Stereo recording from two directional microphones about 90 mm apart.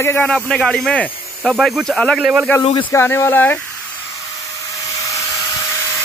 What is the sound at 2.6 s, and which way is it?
Speech, 85° left.